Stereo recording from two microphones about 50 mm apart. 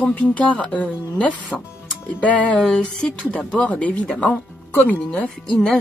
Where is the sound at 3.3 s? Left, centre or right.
Left.